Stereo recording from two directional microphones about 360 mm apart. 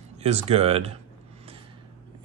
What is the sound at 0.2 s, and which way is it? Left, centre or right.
Speech, centre.